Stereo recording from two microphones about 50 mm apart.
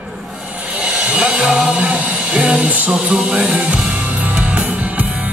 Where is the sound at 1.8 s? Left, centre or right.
Right.